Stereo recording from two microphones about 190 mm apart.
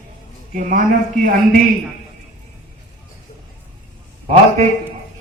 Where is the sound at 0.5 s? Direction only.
45° right (ahead or behind).